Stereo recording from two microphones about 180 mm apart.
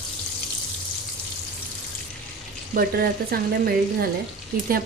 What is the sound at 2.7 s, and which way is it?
Speech, 55° right (ahead or behind).